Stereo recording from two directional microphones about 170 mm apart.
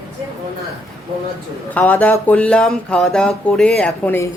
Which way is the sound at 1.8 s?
10° left (ahead or behind).